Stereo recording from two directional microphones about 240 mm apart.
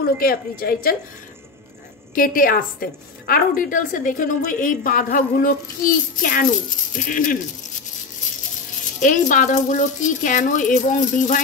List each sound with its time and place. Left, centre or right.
0.2 s a woman's voice: left
2.1 s a woman's voice: left
9.0 s a woman's voice: left